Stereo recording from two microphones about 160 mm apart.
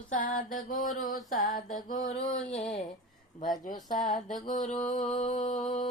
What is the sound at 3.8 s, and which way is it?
Mantra, 55° left (ahead or behind).